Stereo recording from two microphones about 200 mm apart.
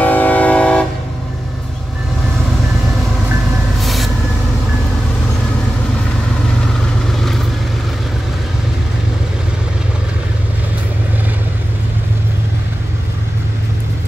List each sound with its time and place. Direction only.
0.0 s train: 10° left (ahead or behind)
3.8 s vehicle: centre (ahead or behind)
7.1 s vehicle: centre (ahead or behind)